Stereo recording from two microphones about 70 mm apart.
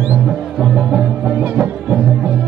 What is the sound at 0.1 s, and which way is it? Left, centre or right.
Music, right.